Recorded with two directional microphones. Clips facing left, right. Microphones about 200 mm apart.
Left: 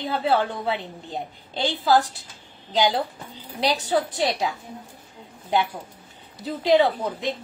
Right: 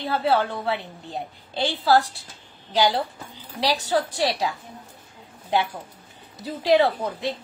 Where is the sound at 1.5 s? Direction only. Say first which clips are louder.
Even; 15° left (ahead or behind).